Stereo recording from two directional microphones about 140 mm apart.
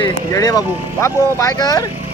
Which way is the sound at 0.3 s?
25° left (ahead or behind).